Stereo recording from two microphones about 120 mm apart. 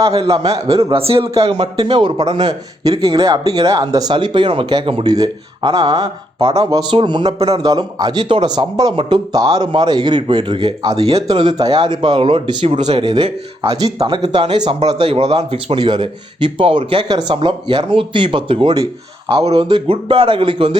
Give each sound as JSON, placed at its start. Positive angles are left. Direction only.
{"t": 0.2, "sound": "speech", "side_deg": -50}
{"t": 5.0, "sound": "speech", "side_deg": -35}
{"t": 10.9, "sound": "speech", "side_deg": -60}
{"t": 11.3, "sound": "speech", "side_deg": -35}
{"t": 14.3, "sound": "speech", "side_deg": -40}